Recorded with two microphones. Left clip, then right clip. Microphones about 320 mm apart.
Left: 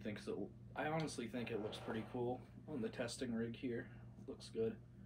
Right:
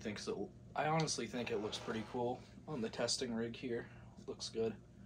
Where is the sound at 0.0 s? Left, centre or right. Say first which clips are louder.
Right 4 dB; centre.